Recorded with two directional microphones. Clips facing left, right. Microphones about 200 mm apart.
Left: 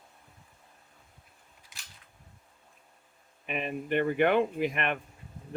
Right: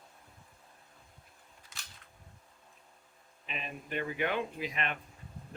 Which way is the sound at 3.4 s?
60° left (ahead or behind).